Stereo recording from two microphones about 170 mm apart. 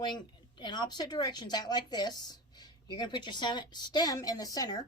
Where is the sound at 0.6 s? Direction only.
25° left (ahead or behind).